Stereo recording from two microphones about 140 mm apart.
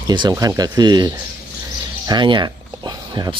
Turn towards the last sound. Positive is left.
turn(degrees=-30)  # may be behind; listen again after turning